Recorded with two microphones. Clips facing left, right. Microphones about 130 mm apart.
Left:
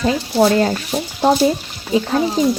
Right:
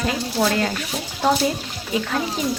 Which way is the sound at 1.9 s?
30° left (ahead or behind).